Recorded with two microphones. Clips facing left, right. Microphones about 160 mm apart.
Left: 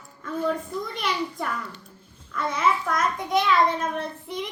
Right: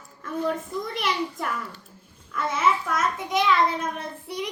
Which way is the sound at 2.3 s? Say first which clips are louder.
Even; 5° right (ahead or behind).